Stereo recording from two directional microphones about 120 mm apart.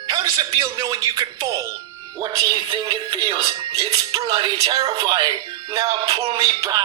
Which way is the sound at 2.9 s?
40° right (ahead or behind).